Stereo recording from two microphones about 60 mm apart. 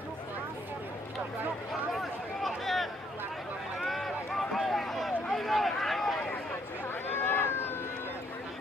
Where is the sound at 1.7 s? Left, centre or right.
Centre.